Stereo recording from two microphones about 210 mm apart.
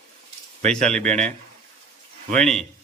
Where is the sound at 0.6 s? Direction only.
5° left (ahead or behind).